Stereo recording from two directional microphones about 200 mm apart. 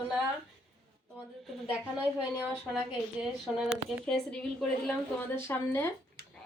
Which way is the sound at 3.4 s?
Centre (ahead or behind).